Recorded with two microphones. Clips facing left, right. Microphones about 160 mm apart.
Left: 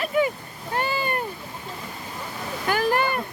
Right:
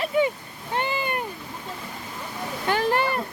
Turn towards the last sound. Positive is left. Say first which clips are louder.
# even
turn(degrees=-30)  # may be behind; listen again after turning